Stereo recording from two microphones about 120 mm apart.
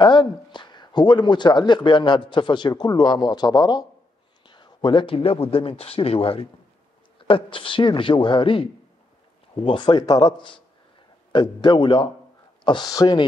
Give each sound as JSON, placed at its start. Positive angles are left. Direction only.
{"t": 0.0, "sound": "speech", "side_deg": 40}